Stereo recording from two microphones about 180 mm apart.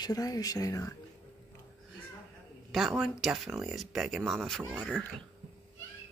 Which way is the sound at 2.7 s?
Centre (ahead or behind).